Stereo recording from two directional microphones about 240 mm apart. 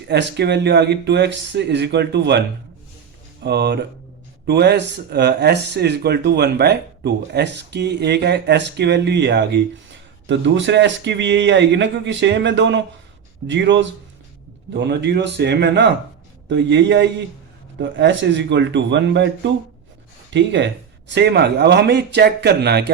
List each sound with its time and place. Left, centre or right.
0.1 s speech: right
3.4 s speech: right